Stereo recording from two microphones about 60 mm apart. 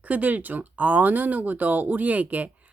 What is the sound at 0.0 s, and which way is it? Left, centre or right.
Speech, right.